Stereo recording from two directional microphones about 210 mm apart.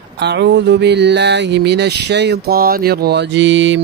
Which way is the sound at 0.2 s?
55° right (ahead or behind).